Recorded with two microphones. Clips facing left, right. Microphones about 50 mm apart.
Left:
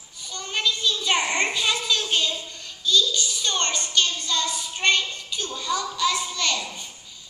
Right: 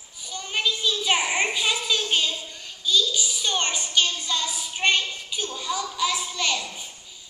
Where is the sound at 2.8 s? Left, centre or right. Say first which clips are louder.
Left 1 dB; centre.